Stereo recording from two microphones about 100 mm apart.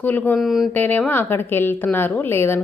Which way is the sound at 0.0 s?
15° left (ahead or behind).